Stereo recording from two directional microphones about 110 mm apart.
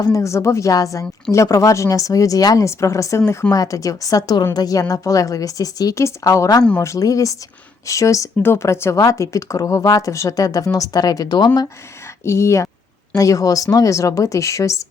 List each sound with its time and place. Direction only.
0.0 s speech: 30° left (ahead or behind)
12.2 s speech: 25° left (ahead or behind)